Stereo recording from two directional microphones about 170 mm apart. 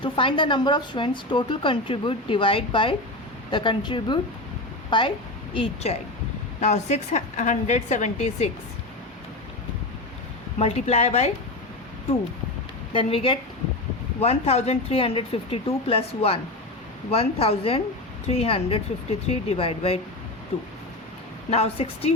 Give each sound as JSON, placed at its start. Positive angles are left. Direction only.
{"t": 0.0, "sound": "a woman's voice", "side_deg": 30}
{"t": 10.6, "sound": "speech", "side_deg": 40}
{"t": 12.9, "sound": "speech", "side_deg": 35}
{"t": 21.5, "sound": "speech", "side_deg": 35}